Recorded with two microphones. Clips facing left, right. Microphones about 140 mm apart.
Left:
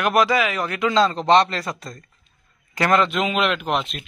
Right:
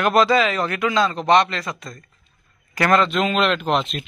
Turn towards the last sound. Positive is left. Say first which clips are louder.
# right 3 dB
turn(degrees=5)  # may be behind; listen again after turning